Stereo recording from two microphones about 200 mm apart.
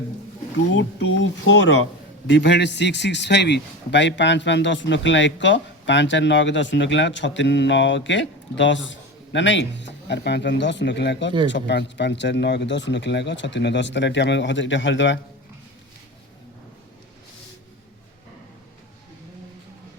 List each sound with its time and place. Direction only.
0.7 s a man's voice: 65° left (ahead or behind)